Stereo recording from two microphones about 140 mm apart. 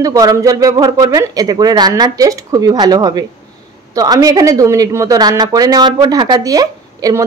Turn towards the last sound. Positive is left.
turn(degrees=-25)  # may be behind; listen again after turning